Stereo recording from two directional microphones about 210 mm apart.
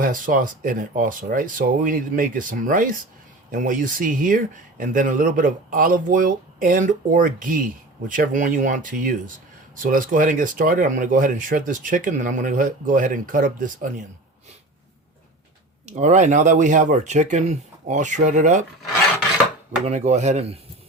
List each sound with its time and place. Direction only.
0.0 s speech: 40° right (ahead or behind)
15.9 s speech: 35° right (ahead or behind)
19.8 s speech: 35° right (ahead or behind)